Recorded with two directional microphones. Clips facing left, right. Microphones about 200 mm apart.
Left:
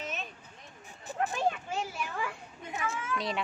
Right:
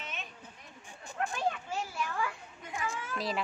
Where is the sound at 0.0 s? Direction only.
40° left (ahead or behind).